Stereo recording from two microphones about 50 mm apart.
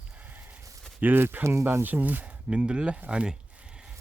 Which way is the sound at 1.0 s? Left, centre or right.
Right.